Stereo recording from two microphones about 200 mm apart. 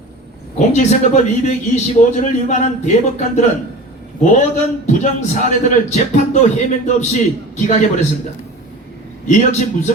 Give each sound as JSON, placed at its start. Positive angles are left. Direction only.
{"t": 0.7, "sound": "a man's voice", "side_deg": 35}
{"t": 9.2, "sound": "a man's voice", "side_deg": 35}